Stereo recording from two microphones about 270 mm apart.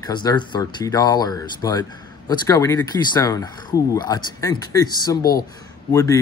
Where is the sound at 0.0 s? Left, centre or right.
Centre.